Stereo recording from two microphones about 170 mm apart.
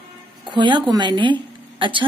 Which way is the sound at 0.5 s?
30° right (ahead or behind).